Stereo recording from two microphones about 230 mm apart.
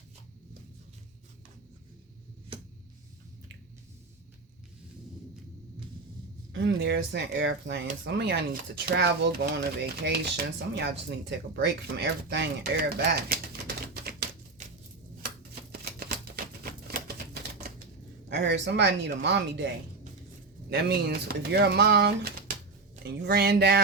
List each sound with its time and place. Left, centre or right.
6.5 s speech: right
15.8 s typewriter: right
18.3 s speech: right
20.7 s speech: right